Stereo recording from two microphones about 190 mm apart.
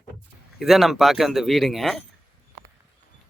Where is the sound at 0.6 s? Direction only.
Centre (ahead or behind).